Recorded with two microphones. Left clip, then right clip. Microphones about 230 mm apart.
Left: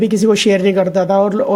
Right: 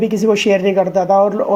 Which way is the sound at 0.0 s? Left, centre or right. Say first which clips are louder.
Left 1 dB; left.